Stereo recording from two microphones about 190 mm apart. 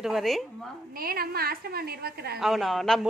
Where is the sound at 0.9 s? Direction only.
50° right (ahead or behind).